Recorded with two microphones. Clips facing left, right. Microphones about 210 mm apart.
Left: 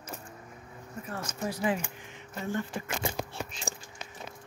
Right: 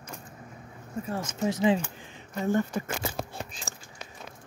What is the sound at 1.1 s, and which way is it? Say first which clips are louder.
Speech: right 5 dB; 20° right (ahead or behind).